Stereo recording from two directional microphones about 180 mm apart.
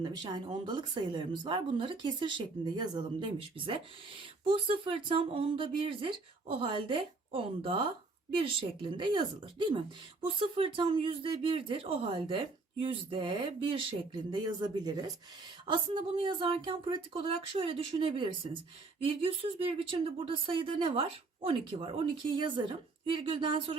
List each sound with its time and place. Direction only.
0.0 s speech: 25° right (ahead or behind)